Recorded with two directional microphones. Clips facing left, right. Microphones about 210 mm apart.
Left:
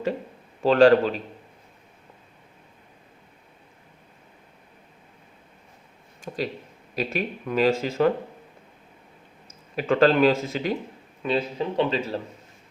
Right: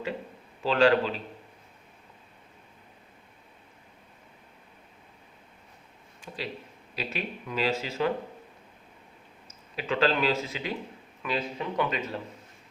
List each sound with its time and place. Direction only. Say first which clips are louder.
0.6 s speech: left 6 dB; 45° left (ahead or behind)
6.2 s speech: left 7 dB; 45° left (ahead or behind)
9.7 s speech: left 7 dB; 50° left (ahead or behind)
11.2 s speech: left 6 dB; 30° left (ahead or behind)